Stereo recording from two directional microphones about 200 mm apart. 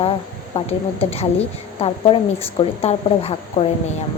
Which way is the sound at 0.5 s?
30° left (ahead or behind).